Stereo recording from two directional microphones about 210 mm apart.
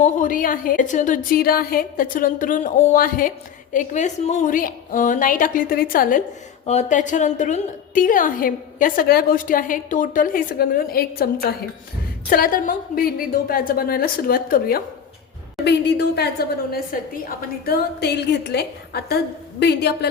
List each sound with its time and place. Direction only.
0.0 s a woman's voice: 40° left (ahead or behind)
12.3 s a woman's voice: 40° left (ahead or behind)